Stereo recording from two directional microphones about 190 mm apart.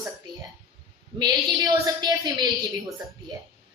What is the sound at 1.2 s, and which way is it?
A woman's voice, 20° right (ahead or behind).